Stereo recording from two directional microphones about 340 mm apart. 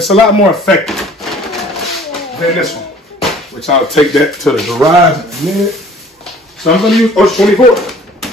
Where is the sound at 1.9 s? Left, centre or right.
Centre.